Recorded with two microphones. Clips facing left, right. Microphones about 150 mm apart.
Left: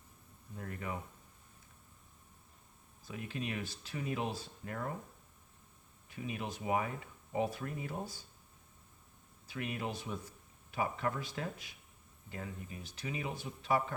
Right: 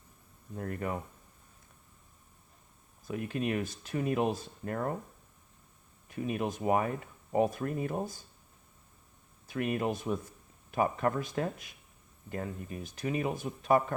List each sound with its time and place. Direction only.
0.5 s speech: 50° right (ahead or behind)
3.1 s speech: 50° right (ahead or behind)
6.1 s speech: 50° right (ahead or behind)
9.5 s speech: 55° right (ahead or behind)